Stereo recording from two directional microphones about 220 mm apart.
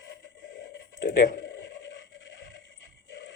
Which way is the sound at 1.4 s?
55° left (ahead or behind).